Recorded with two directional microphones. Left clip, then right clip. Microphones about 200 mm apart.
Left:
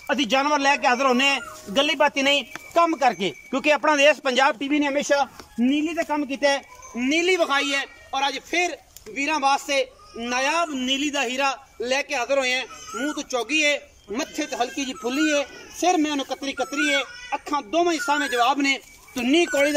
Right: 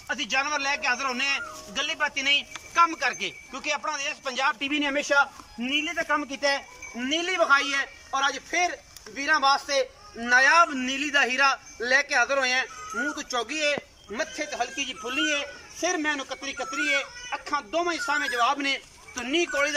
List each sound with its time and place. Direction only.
0.1 s a man's voice: 40° left (ahead or behind)
4.6 s speech: 30° left (ahead or behind)